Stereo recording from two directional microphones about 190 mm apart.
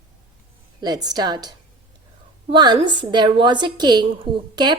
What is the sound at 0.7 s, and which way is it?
A woman's voice, 20° right (ahead or behind).